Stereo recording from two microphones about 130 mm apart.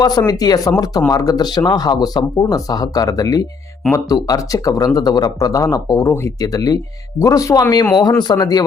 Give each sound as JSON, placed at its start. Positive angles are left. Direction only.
{"t": 0.0, "sound": "speech", "side_deg": 30}